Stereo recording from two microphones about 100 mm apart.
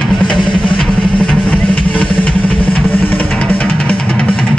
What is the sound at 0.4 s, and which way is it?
Music, 50° left (ahead or behind).